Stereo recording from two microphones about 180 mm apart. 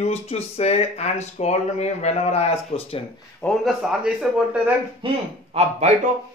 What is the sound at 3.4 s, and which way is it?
Speech, centre (ahead or behind).